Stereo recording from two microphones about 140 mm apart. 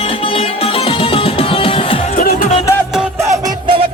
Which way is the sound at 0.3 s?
40° left (ahead or behind).